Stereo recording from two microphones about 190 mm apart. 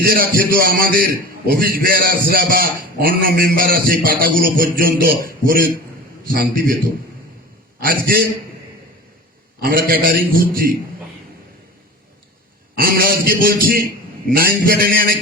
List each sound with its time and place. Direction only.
0.0 s a man's voice: 50° right (ahead or behind)
7.8 s a man's voice: 50° right (ahead or behind)
9.6 s a man's voice: 50° right (ahead or behind)
12.7 s a man's voice: 50° right (ahead or behind)